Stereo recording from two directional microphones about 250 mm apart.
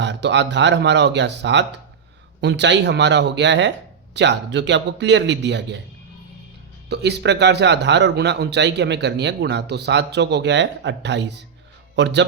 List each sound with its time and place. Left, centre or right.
0.0 s a man's voice: right
6.9 s a man's voice: right